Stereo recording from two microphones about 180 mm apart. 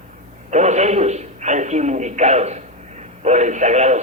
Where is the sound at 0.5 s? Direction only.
40° right (ahead or behind).